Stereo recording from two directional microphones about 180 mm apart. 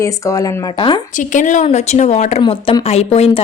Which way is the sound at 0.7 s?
30° left (ahead or behind).